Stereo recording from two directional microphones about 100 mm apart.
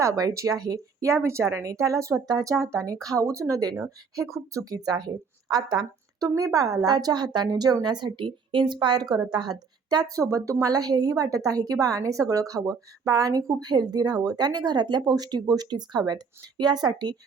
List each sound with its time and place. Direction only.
0.0 s a woman's voice: 35° right (ahead or behind)